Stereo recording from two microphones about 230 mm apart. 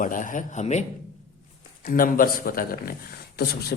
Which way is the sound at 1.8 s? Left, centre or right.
Left.